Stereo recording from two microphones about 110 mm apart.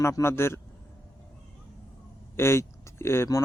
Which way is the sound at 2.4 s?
25° left (ahead or behind).